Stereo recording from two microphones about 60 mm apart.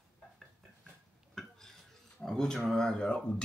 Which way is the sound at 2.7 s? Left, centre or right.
Centre.